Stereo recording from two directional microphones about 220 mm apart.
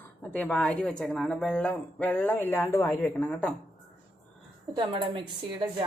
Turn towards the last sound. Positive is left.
turn(degrees=-20)  # may be behind; listen again after turning